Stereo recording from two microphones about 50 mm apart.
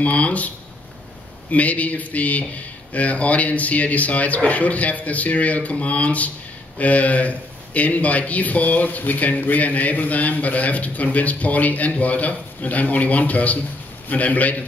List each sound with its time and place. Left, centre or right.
0.0 s speech: left
1.5 s a man's voice: left